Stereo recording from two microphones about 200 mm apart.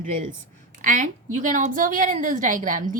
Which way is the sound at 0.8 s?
40° right (ahead or behind).